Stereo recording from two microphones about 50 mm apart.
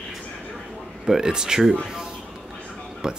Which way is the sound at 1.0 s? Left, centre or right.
Centre.